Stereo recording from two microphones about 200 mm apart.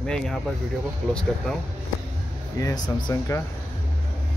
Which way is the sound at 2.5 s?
20° left (ahead or behind).